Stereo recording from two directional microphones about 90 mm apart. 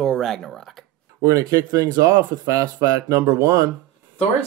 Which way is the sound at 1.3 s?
40° right (ahead or behind).